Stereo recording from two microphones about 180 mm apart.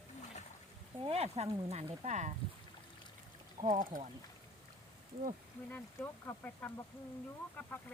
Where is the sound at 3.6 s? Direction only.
45° right (ahead or behind).